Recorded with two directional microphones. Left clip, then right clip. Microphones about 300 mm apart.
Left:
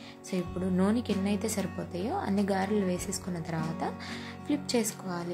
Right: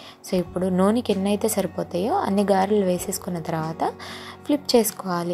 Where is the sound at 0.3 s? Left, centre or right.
Centre.